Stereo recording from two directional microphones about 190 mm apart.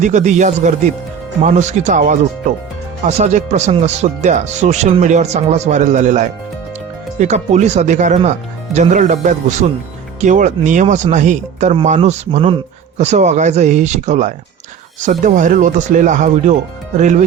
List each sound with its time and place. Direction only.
0.0 s speech: 40° right (ahead or behind)